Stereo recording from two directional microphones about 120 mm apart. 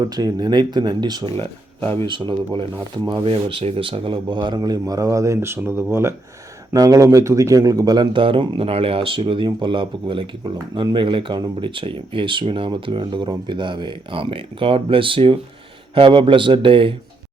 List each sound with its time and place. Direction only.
0.0 s speech: 35° right (ahead or behind)
6.7 s speech: 30° right (ahead or behind); by 16.9 s 45° right (ahead or behind)